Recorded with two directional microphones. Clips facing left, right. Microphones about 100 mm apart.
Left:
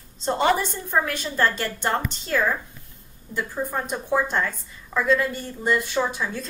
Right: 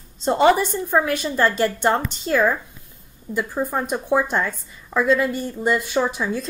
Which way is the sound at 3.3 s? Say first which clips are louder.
Right 4 dB; 15° right (ahead or behind).